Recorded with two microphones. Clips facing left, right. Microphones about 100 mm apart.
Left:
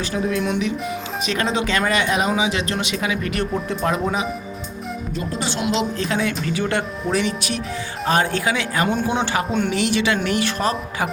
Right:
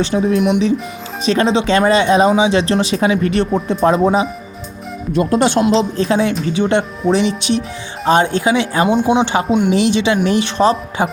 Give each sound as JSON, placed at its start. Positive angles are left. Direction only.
{"t": 0.0, "sound": "speech", "side_deg": -25}
{"t": 1.2, "sound": "speech", "side_deg": -30}
{"t": 5.1, "sound": "speech", "side_deg": -70}
{"t": 5.5, "sound": "speech", "side_deg": -35}